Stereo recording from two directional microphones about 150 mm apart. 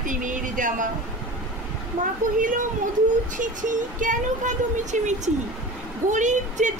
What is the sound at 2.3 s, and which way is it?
Speech, 60° right (ahead or behind).